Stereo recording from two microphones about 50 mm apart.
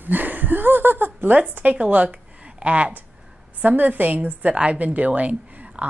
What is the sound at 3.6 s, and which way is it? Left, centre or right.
A woman's voice, right.